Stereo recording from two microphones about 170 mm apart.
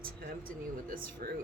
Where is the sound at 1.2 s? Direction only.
55° right (ahead or behind).